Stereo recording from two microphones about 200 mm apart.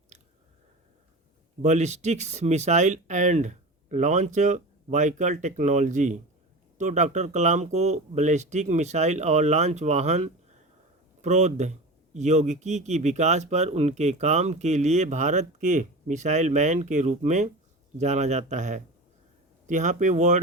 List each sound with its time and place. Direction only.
1.6 s a man's voice: 35° right (ahead or behind)